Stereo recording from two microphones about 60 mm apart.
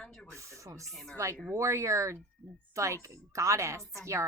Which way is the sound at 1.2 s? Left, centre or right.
Right.